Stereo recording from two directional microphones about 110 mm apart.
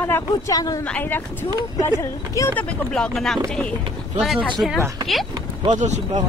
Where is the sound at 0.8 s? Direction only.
15° left (ahead or behind).